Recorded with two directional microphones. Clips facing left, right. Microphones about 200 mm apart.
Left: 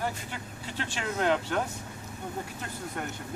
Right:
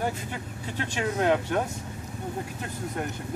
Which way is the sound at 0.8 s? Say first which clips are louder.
Right 4 dB; 15° right (ahead or behind).